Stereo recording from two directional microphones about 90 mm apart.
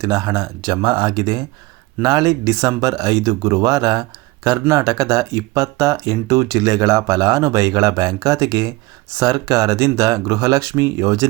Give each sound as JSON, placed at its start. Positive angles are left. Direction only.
{"t": 0.0, "sound": "speech", "side_deg": -45}